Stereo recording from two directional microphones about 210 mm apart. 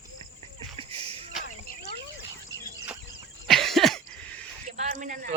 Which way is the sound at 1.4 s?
40° left (ahead or behind).